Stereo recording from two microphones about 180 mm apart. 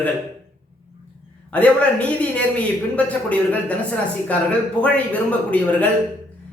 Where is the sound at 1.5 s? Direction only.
5° left (ahead or behind).